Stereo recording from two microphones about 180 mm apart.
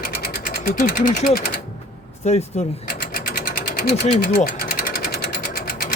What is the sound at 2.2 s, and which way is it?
Speech, 40° left (ahead or behind).